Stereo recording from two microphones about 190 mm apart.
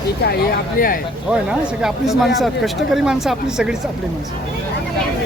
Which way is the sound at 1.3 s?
5° right (ahead or behind).